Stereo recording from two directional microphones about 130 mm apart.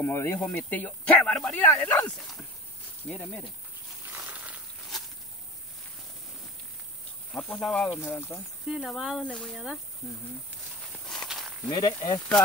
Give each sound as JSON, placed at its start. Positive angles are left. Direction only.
{"t": 0.0, "sound": "speech", "side_deg": 20}
{"t": 2.0, "sound": "speech", "side_deg": 0}
{"t": 3.1, "sound": "speech", "side_deg": 15}
{"t": 4.1, "sound": "a sound", "side_deg": -10}
{"t": 7.5, "sound": "speech", "side_deg": 5}
{"t": 8.0, "sound": "speech", "side_deg": 15}
{"t": 8.6, "sound": "speech", "side_deg": 0}
{"t": 10.8, "sound": "walk", "side_deg": 5}
{"t": 11.7, "sound": "speech", "side_deg": 30}